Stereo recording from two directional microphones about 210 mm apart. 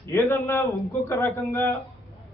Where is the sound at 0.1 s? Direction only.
10° left (ahead or behind).